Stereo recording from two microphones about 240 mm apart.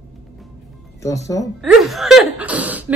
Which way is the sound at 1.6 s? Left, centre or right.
Centre.